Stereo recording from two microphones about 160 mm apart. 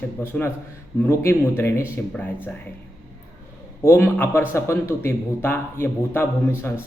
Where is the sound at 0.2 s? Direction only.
15° left (ahead or behind).